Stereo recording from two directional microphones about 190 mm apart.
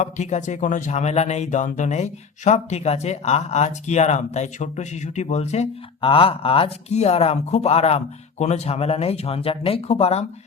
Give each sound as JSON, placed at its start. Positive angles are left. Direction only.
{"t": 0.0, "sound": "speech", "side_deg": 40}